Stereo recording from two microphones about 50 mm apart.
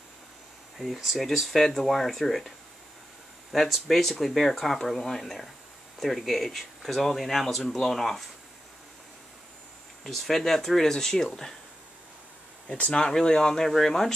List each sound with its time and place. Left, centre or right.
0.7 s speech: centre
3.5 s speech: centre
10.0 s speech: centre
12.6 s speech: left
13.0 s speech: centre